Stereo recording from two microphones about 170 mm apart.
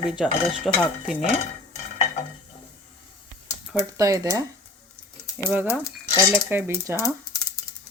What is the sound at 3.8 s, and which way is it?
Speech, 20° right (ahead or behind).